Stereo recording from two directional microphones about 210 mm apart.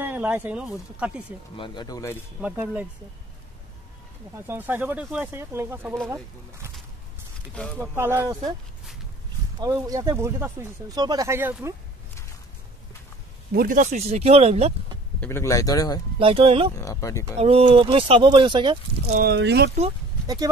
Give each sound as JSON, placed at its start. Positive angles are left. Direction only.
{"t": 0.0, "sound": "speech", "side_deg": -10}
{"t": 1.6, "sound": "speech", "side_deg": 20}
{"t": 2.4, "sound": "speech", "side_deg": -5}
{"t": 4.5, "sound": "speech", "side_deg": -10}
{"t": 7.7, "sound": "speech", "side_deg": -10}
{"t": 9.6, "sound": "speech", "side_deg": -15}
{"t": 13.5, "sound": "speech", "side_deg": -45}
{"t": 15.1, "sound": "speech", "side_deg": 10}
{"t": 16.2, "sound": "speech", "side_deg": -25}
{"t": 16.7, "sound": "speech", "side_deg": 15}
{"t": 17.4, "sound": "speech", "side_deg": -25}
{"t": 19.1, "sound": "speech", "side_deg": -50}